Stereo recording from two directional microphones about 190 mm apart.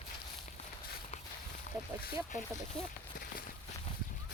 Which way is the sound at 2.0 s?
45° left (ahead or behind).